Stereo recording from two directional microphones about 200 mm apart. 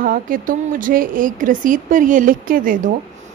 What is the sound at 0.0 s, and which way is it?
A woman's voice, 45° right (ahead or behind).